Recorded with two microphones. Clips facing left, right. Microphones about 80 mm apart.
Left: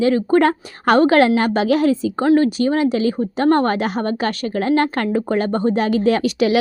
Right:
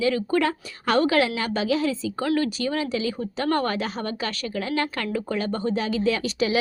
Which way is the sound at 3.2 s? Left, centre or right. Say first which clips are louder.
Left 9 dB; left.